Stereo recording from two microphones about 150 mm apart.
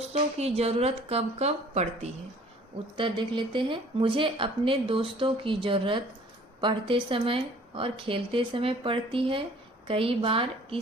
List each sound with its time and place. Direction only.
0.3 s a woman's voice: 45° right (ahead or behind)
3.0 s speech: 35° right (ahead or behind)